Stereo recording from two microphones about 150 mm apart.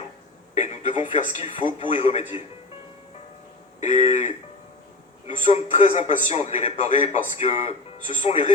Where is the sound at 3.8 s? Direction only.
45° left (ahead or behind).